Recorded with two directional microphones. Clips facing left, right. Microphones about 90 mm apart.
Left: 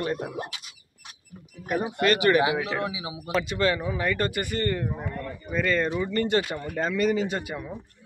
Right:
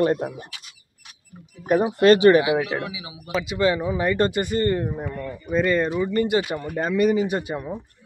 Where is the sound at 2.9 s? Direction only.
25° left (ahead or behind).